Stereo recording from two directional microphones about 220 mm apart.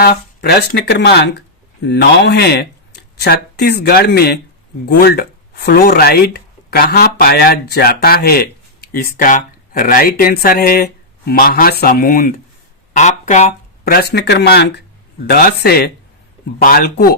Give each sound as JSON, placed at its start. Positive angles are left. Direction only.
{"t": 0.0, "sound": "speech", "side_deg": 45}